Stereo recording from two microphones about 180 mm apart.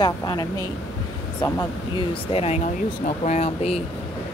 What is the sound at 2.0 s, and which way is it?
Speech, 35° left (ahead or behind).